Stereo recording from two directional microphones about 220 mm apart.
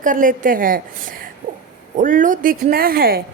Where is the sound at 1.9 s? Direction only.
35° right (ahead or behind).